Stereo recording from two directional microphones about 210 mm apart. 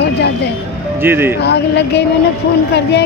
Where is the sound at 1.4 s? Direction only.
55° left (ahead or behind).